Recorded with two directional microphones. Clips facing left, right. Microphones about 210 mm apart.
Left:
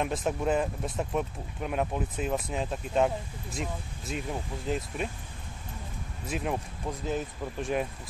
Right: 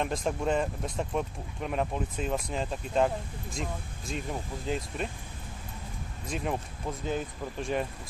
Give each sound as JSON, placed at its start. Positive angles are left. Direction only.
{"t": 0.0, "sound": "speech", "side_deg": 5}
{"t": 6.2, "sound": "speech", "side_deg": 0}